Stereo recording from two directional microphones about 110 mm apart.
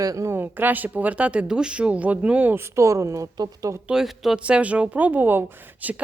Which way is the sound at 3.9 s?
5° right (ahead or behind).